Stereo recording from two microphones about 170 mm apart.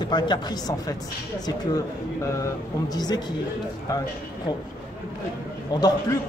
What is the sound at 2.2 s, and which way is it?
Speech, 20° left (ahead or behind).